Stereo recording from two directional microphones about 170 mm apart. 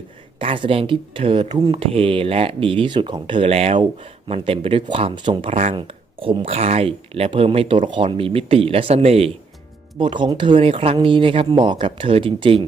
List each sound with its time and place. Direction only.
0.3 s speech: 30° right (ahead or behind)